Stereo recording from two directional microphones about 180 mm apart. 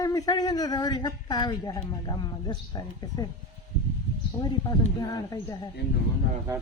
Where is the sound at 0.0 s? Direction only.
20° left (ahead or behind).